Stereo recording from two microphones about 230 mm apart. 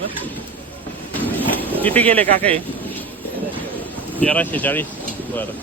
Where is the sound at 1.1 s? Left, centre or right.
Centre.